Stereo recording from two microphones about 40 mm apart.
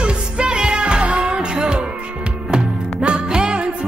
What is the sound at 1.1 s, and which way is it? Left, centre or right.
Music, centre.